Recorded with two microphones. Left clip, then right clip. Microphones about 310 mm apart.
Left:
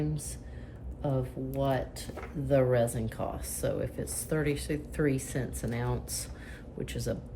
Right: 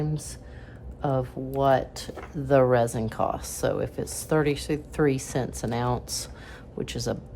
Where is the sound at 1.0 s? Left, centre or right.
Centre.